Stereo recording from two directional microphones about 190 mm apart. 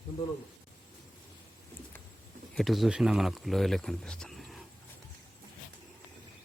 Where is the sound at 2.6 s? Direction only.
Centre (ahead or behind).